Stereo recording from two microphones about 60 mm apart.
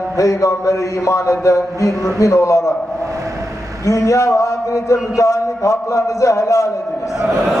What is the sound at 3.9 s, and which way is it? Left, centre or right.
A man's voice, left.